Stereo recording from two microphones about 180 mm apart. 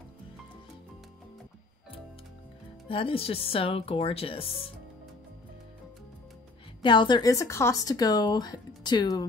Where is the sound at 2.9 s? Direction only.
30° left (ahead or behind).